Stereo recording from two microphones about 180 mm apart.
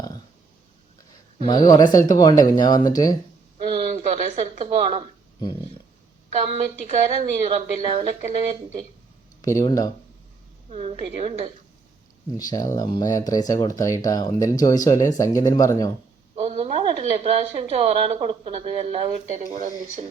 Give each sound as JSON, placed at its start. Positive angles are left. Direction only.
{"t": 1.5, "sound": "speech", "side_deg": 20}
{"t": 3.8, "sound": "a sound", "side_deg": -40}
{"t": 6.3, "sound": "speech", "side_deg": -35}
{"t": 9.4, "sound": "speech", "side_deg": 20}
{"t": 10.7, "sound": "speech", "side_deg": -35}
{"t": 12.4, "sound": "speech", "side_deg": 20}
{"t": 16.3, "sound": "speech", "side_deg": -35}